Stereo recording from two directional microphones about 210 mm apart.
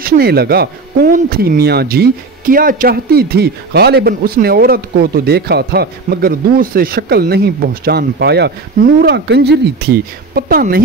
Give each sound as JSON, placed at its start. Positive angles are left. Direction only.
{"t": 0.0, "sound": "speech", "side_deg": -45}